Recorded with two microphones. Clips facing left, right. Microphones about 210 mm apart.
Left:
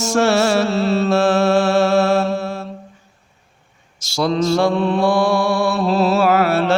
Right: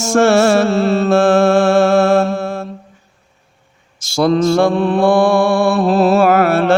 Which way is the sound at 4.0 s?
55° right (ahead or behind).